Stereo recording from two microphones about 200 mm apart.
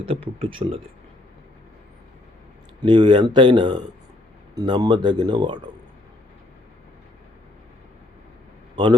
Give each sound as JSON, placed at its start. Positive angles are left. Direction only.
{"t": 0.0, "sound": "speech", "side_deg": -30}
{"t": 2.8, "sound": "speech", "side_deg": -25}
{"t": 8.7, "sound": "a man's voice", "side_deg": -25}